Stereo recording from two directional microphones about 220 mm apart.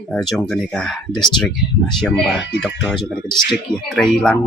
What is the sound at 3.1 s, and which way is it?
Speech, centre (ahead or behind).